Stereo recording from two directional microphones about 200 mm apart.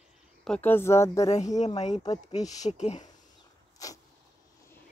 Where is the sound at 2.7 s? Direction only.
35° left (ahead or behind).